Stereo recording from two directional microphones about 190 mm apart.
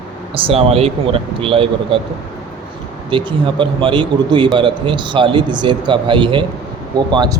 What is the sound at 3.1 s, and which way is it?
A man's voice, 25° right (ahead or behind).